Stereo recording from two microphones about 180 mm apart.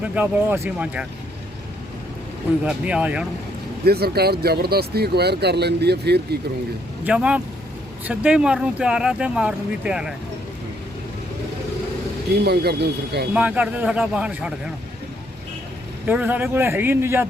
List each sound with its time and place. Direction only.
0.0 s a man's voice: 10° right (ahead or behind)
2.6 s a man's voice: 5° right (ahead or behind)
3.8 s speech: 60° right (ahead or behind)
7.0 s a man's voice: 5° right (ahead or behind)
12.5 s speech: 65° right (ahead or behind)
13.3 s a man's voice: 5° right (ahead or behind)
16.0 s a man's voice: 10° right (ahead or behind)